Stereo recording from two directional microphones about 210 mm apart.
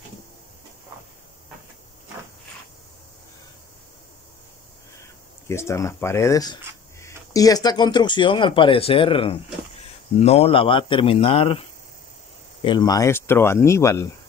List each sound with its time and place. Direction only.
5.5 s speech: 15° left (ahead or behind)
12.6 s speech: 20° left (ahead or behind)